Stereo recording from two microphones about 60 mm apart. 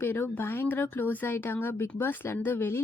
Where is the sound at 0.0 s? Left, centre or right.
Left.